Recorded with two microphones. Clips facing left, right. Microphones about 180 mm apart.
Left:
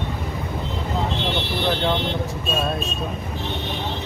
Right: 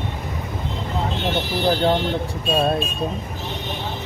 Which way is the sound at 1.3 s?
40° right (ahead or behind).